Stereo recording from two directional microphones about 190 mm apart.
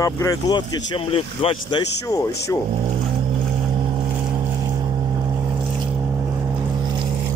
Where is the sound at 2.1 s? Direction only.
15° left (ahead or behind).